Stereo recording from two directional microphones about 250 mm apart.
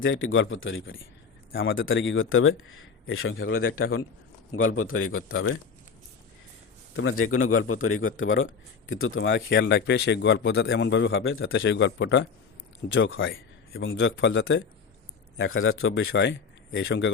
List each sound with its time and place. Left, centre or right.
0.0 s a man's voice: left
6.9 s a man's voice: left